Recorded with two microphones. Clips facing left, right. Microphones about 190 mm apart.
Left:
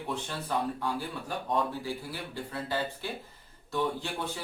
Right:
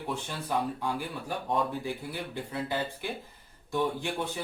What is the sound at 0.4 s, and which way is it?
Speech, 15° right (ahead or behind).